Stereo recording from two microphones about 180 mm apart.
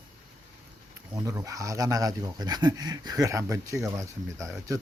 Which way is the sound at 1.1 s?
20° right (ahead or behind).